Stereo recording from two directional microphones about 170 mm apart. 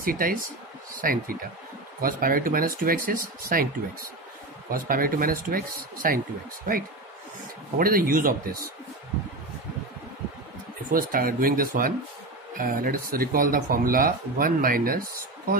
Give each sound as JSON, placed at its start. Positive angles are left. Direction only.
{"t": 0.0, "sound": "speech", "side_deg": -55}
{"t": 7.7, "sound": "speech", "side_deg": -60}
{"t": 10.9, "sound": "speech", "side_deg": -55}